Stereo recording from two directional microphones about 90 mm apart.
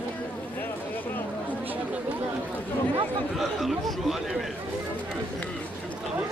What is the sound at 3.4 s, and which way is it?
Speech, centre (ahead or behind).